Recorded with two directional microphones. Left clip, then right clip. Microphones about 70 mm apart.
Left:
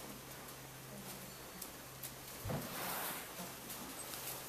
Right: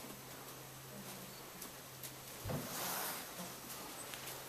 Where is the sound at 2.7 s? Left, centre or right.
Right.